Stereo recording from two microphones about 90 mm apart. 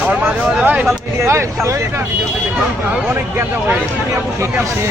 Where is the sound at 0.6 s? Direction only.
15° right (ahead or behind).